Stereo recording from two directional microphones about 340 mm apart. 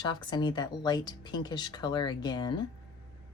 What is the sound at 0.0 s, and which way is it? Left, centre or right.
Speech, centre.